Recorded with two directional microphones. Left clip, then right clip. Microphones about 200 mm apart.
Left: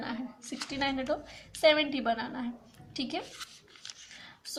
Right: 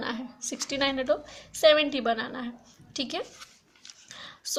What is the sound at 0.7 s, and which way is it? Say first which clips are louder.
A woman's voice: right 5 dB; 50° right (ahead or behind).